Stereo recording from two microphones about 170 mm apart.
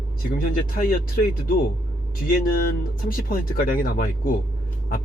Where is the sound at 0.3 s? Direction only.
55° left (ahead or behind).